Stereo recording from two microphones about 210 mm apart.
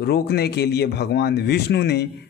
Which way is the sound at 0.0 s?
50° left (ahead or behind).